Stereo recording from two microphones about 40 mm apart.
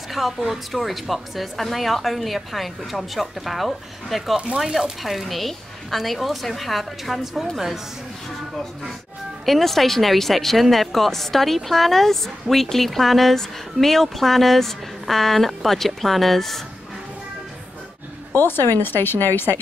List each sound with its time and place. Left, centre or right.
0.2 s a woman's voice: centre
9.5 s a woman's voice: centre
18.4 s speech: left